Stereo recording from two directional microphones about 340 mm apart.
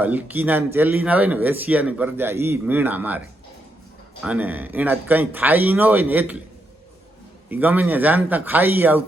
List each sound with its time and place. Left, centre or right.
0.0 s speech: centre
7.5 s speech: centre